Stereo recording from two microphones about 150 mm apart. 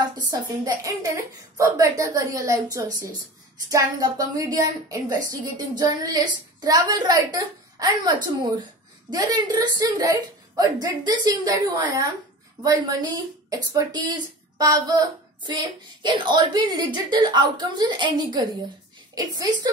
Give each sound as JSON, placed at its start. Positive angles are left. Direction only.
{"t": 0.0, "sound": "speech", "side_deg": -25}